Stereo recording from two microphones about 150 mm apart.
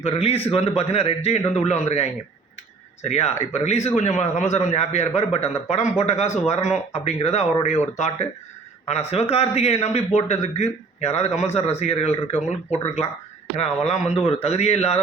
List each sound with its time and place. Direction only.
0.0 s a man's voice: 45° left (ahead or behind)